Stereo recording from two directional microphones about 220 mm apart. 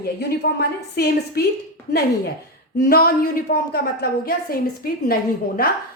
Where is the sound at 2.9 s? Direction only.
45° left (ahead or behind).